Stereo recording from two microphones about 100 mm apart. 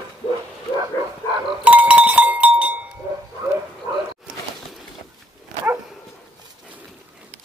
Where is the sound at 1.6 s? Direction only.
15° right (ahead or behind).